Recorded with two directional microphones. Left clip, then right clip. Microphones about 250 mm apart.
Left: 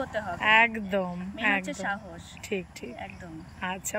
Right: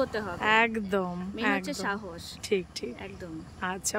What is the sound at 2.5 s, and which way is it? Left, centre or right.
Speech, right.